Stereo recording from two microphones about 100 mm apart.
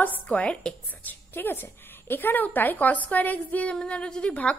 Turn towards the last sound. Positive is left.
turn(degrees=10)  # may be behind; listen again after turning